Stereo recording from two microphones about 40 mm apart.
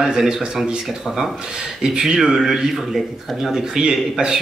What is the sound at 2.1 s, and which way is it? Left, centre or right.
Speech, centre.